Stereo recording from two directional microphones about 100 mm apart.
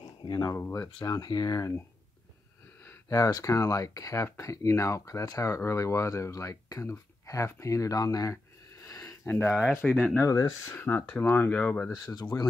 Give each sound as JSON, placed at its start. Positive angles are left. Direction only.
{"t": 0.2, "sound": "a sound", "side_deg": 45}
{"t": 0.5, "sound": "speech", "side_deg": 25}
{"t": 1.0, "sound": "speech", "side_deg": 40}
{"t": 3.1, "sound": "speech", "side_deg": 40}
{"t": 8.8, "sound": "sniff", "side_deg": 30}
{"t": 9.3, "sound": "speech", "side_deg": 25}
{"t": 10.2, "sound": "speech", "side_deg": 35}
{"t": 10.7, "sound": "speech", "side_deg": 20}
{"t": 12.3, "sound": "speech", "side_deg": 40}